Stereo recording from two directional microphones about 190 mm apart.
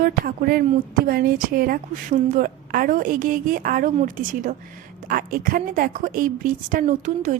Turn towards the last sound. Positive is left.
turn(degrees=-40)  # may be behind; listen again after turning